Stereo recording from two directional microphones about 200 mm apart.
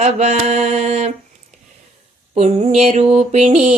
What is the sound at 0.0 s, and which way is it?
Mantra, 35° right (ahead or behind).